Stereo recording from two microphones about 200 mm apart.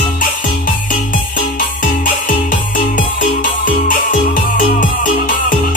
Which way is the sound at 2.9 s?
45° left (ahead or behind).